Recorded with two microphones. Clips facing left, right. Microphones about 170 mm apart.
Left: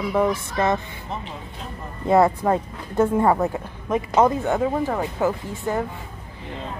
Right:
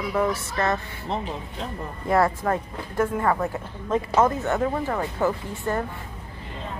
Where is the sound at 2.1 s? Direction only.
20° left (ahead or behind).